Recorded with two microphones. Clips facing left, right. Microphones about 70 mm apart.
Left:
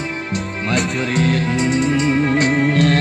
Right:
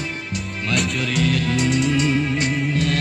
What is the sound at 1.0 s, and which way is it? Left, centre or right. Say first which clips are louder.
Music: left 3 dB; left.